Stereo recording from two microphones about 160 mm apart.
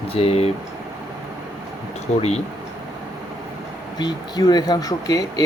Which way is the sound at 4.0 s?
25° left (ahead or behind).